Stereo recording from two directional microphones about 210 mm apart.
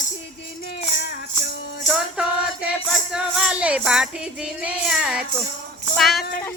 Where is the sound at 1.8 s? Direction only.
5° right (ahead or behind).